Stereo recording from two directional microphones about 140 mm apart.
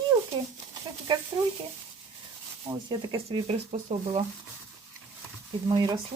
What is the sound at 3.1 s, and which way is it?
Speech, 35° right (ahead or behind).